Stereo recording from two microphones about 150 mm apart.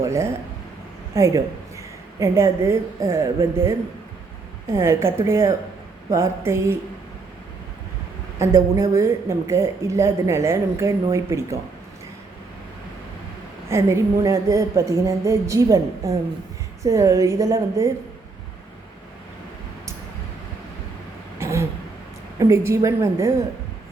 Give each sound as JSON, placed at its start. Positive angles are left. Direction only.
{"t": 0.0, "sound": "a woman's voice", "side_deg": -20}
{"t": 8.4, "sound": "speech", "side_deg": -20}
{"t": 13.7, "sound": "speech", "side_deg": -20}
{"t": 21.3, "sound": "a sound", "side_deg": -20}
{"t": 22.4, "sound": "speech", "side_deg": -20}